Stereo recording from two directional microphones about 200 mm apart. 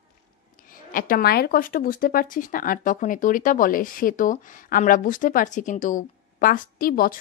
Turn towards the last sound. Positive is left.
turn(degrees=50)  # may be behind; listen again after turning